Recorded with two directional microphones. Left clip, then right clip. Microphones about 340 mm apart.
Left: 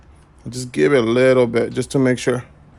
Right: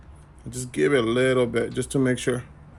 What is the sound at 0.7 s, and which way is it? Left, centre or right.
Speech, left.